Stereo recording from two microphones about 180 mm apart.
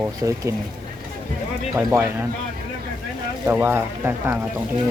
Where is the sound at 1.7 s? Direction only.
15° right (ahead or behind).